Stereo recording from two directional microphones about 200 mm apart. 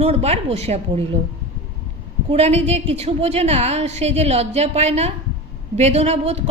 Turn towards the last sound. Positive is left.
turn(degrees=-30)  # may be behind; listen again after turning